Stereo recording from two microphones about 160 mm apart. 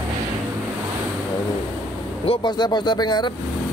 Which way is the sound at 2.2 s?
30° left (ahead or behind).